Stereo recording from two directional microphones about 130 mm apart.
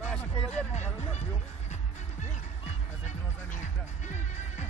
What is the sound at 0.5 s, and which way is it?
Music, 60° left (ahead or behind).